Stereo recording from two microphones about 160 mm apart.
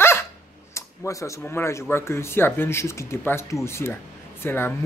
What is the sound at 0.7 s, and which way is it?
Speech, 20° left (ahead or behind).